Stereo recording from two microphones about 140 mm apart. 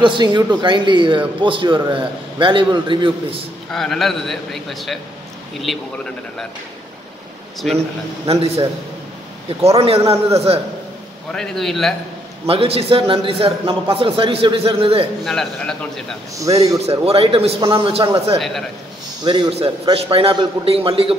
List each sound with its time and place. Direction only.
0.0 s a man's voice: 35° right (ahead or behind)
3.7 s a man's voice: centre (ahead or behind)
7.6 s a man's voice: centre (ahead or behind)
8.3 s a man's voice: 45° right (ahead or behind)
11.3 s a man's voice: centre (ahead or behind)
12.4 s a man's voice: 45° right (ahead or behind)
15.2 s a man's voice: 5° left (ahead or behind)
16.3 s a man's voice: 25° right (ahead or behind)
17.0 s a man's voice: 45° right (ahead or behind)